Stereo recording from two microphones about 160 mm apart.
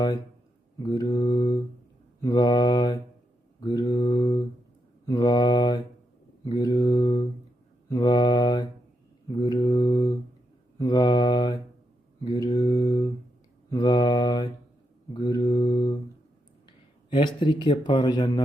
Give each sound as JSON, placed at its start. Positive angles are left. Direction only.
{"t": 0.8, "sound": "speech", "side_deg": 25}
{"t": 15.1, "sound": "mantra", "side_deg": 25}
{"t": 17.1, "sound": "speech", "side_deg": 30}